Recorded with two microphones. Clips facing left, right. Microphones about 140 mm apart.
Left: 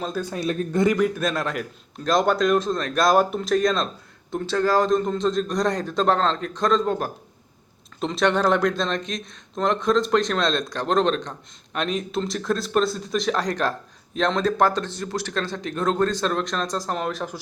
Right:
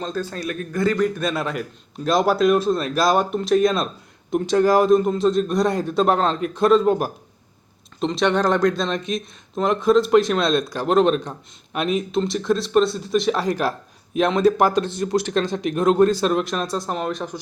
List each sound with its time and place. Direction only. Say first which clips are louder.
0.0 s speech: right 1 dB; 10° left (ahead or behind)
0.4 s speech: left 2 dB; 25° left (ahead or behind)
0.9 s speech: right 1 dB; 5° left (ahead or behind)
4.3 s a man's voice: right 5 dB; 15° right (ahead or behind)
8.0 s speech: right 1 dB; centre (ahead or behind)